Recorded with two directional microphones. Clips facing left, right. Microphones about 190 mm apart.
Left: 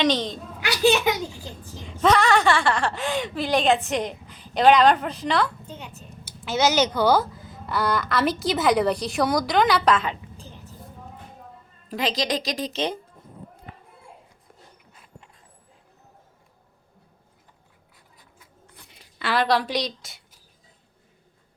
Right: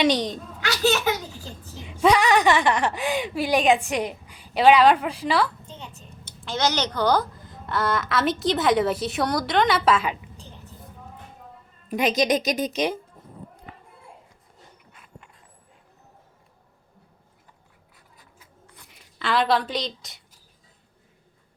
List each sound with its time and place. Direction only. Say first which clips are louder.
0.0 s speech: right 1 dB; 15° right (ahead or behind)
0.6 s a child's voice: left 3 dB; 15° left (ahead or behind)
1.9 s speech: right 1 dB; 10° right (ahead or behind)
5.6 s speech: left 2 dB; 10° left (ahead or behind); by 10.2 s 5° right (ahead or behind)
11.9 s a woman's voice: right 4 dB; 20° right (ahead or behind)
19.2 s a woman's voice: even; centre (ahead or behind)